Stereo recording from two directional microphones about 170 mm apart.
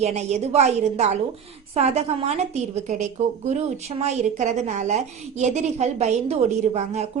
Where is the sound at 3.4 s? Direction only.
40° right (ahead or behind).